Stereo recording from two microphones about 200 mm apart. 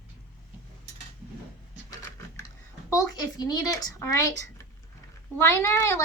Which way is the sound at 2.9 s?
15° left (ahead or behind).